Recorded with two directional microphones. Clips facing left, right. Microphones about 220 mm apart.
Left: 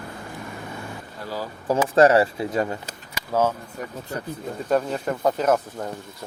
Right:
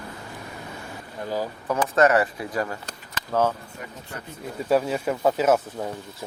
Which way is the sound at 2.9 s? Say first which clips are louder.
Left 1 dB; 10° left (ahead or behind).